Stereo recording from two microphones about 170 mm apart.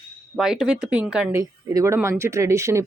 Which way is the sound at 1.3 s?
20° right (ahead or behind).